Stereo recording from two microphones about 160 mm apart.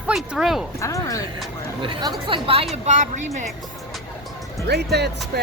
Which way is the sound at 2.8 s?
45° right (ahead or behind).